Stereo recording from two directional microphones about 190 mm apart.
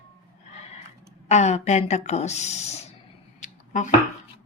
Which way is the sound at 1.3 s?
35° left (ahead or behind).